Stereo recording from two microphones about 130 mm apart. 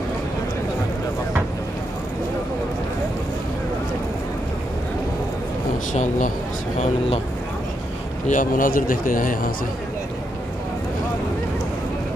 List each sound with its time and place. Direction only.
5.9 s speech: 80° left
8.3 s a man's voice: 90° left